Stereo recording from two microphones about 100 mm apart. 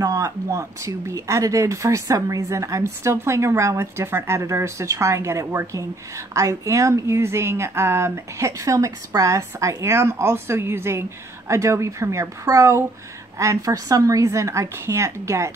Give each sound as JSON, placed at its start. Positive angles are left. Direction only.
{"t": 0.0, "sound": "a woman's voice", "side_deg": -35}